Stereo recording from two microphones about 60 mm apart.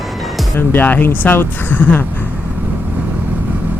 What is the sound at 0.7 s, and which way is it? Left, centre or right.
Speech, left.